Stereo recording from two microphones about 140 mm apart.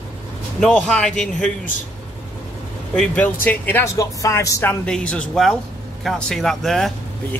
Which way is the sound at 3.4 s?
15° left (ahead or behind).